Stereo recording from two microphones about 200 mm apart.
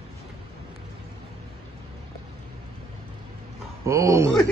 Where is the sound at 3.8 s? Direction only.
15° right (ahead or behind).